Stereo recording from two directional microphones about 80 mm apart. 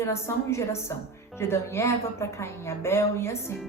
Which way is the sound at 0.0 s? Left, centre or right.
Left.